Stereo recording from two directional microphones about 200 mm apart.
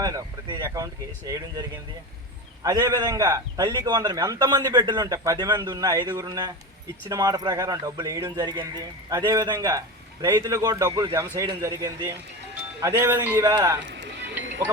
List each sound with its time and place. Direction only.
0.0 s speech: 15° right (ahead or behind)
2.6 s a man's voice: 15° right (ahead or behind)
13.8 s music: 60° right (ahead or behind)